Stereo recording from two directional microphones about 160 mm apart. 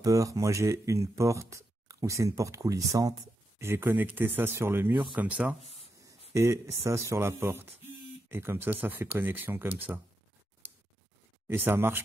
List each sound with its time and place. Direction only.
0.0 s speech: 20° right (ahead or behind)
11.4 s speech: 15° right (ahead or behind)